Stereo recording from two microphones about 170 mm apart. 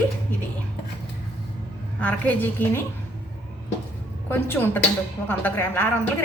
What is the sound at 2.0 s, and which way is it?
Speech, 10° left (ahead or behind).